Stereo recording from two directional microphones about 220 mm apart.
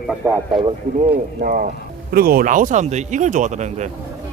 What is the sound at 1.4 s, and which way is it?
Speech, 40° right (ahead or behind).